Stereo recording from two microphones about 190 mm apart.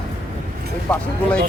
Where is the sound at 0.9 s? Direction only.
5° left (ahead or behind).